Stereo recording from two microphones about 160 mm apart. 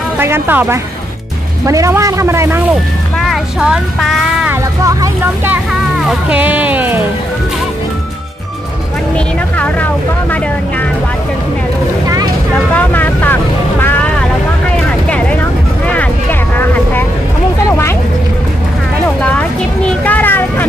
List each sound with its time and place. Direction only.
0.2 s speech: 15° right (ahead or behind)
3.2 s vehicle: centre (ahead or behind)
4.8 s speech: 15° right (ahead or behind)
5.9 s speech: 5° right (ahead or behind)
12.7 s vehicle: 10° left (ahead or behind)
15.9 s vehicle: 10° left (ahead or behind)
17.6 s a sound: 15° left (ahead or behind)
20.1 s vehicle: 10° left (ahead or behind)